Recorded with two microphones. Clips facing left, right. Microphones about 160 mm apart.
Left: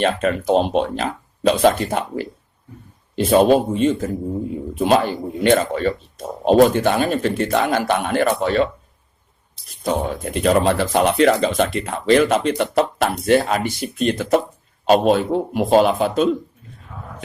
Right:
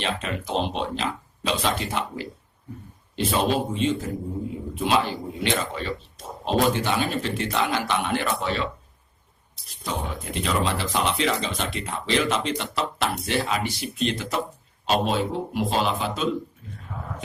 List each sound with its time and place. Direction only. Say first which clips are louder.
0.0 s speech: left 10 dB; 50° left (ahead or behind)
10.4 s speech: left 9 dB; 50° left (ahead or behind)